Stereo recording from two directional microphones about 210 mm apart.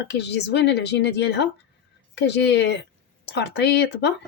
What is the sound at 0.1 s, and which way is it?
A woman's voice, 55° left (ahead or behind).